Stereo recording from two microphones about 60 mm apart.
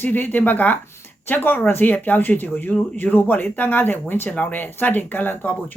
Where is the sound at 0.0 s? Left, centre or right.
Left.